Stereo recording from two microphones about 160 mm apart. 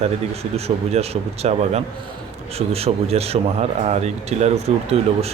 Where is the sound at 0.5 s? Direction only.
40° right (ahead or behind).